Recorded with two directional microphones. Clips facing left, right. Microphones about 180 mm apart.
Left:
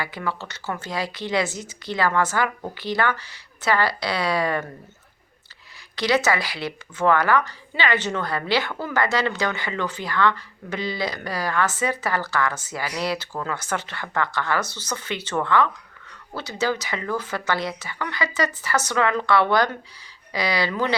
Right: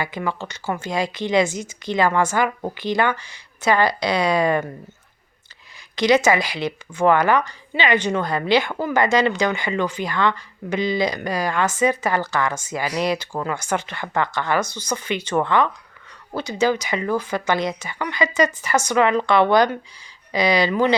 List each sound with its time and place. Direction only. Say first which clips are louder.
0.0 s a woman's voice: right 3 dB; 20° right (ahead or behind)
6.0 s a woman's voice: right 5 dB; 20° right (ahead or behind)